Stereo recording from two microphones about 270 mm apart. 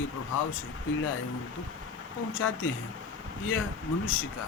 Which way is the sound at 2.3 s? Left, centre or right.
Left.